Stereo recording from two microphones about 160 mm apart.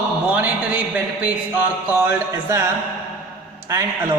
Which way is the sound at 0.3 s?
10° right (ahead or behind).